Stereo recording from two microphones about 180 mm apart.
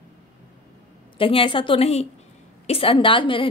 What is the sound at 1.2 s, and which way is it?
A woman's voice, 30° left (ahead or behind).